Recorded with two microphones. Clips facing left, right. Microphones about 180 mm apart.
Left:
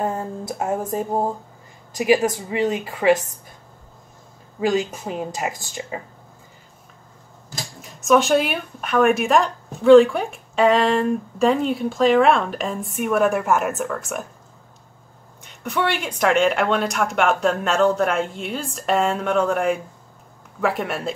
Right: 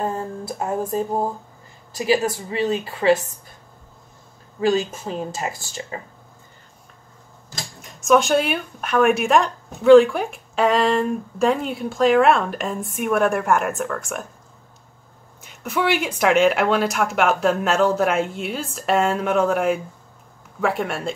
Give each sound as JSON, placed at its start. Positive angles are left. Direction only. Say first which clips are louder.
{"t": 0.0, "sound": "music", "louder": "left 1 dB", "side_deg": 20}
{"t": 2.0, "sound": "speech", "louder": "left 2 dB", "side_deg": 15}
{"t": 4.6, "sound": "speech", "louder": "right 1 dB", "side_deg": 15}
{"t": 7.5, "sound": "speech", "louder": "left 1 dB", "side_deg": 0}
{"t": 15.4, "sound": "speech", "louder": "right 1 dB", "side_deg": -5}